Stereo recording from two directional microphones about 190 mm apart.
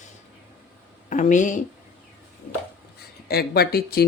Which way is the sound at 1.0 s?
40° left (ahead or behind).